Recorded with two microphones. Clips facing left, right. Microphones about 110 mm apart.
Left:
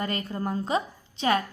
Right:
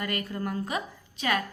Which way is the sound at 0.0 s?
25° left (ahead or behind).